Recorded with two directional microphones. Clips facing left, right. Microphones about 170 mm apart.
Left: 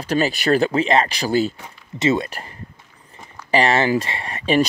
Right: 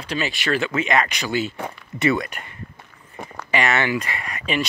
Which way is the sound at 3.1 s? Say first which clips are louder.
Right 7 dB; 65° right (ahead or behind).